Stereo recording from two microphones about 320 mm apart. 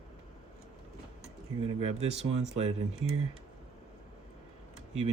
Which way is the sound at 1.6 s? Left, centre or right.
Centre.